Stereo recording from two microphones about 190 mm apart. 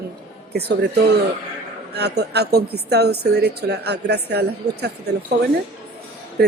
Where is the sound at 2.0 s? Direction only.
60° right (ahead or behind).